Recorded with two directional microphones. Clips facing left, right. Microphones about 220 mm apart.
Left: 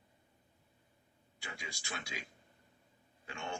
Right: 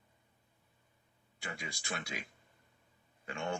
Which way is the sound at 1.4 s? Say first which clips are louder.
Right 4 dB; 55° right (ahead or behind).